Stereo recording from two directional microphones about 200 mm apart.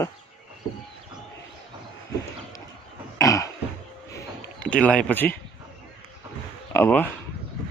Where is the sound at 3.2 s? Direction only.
15° left (ahead or behind).